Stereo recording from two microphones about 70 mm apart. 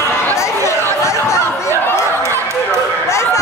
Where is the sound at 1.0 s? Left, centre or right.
Left.